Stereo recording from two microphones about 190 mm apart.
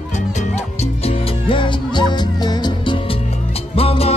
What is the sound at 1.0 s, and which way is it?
Music, 25° left (ahead or behind).